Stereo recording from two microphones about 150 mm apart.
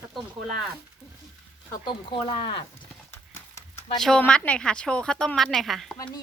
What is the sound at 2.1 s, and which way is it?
Speech, 35° left (ahead or behind).